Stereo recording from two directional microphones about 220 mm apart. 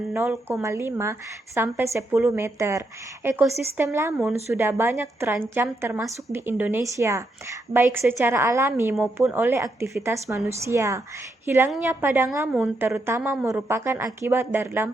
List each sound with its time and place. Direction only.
0.1 s a woman's voice: 10° right (ahead or behind)